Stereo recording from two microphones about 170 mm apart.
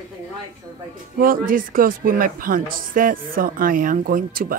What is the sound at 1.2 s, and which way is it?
A woman's voice, 55° right (ahead or behind).